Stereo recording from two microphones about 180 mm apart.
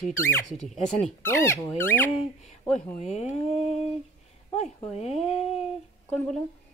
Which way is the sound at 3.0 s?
40° left (ahead or behind).